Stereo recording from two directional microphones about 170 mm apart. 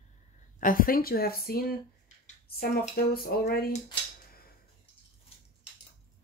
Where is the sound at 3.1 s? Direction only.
65° left (ahead or behind).